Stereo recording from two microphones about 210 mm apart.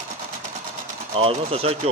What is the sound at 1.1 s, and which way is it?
Speech, 25° right (ahead or behind).